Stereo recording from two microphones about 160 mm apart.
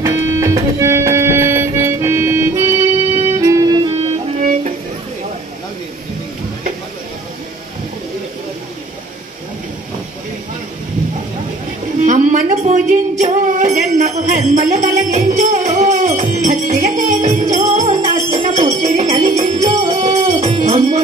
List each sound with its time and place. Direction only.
0.0 s music: 20° right (ahead or behind)
3.9 s music: 40° right (ahead or behind)
12.0 s a sound: 50° right (ahead or behind)
13.2 s jingle bell: 50° right (ahead or behind)
17.6 s music: 40° right (ahead or behind)